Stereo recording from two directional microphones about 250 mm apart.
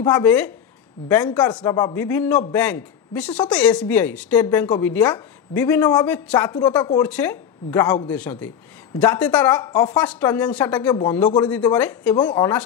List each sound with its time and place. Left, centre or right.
0.0 s a man's voice: centre
1.4 s a man's voice: centre
11.2 s a man's voice: centre